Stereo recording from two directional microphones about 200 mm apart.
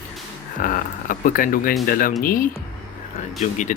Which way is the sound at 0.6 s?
40° left (ahead or behind).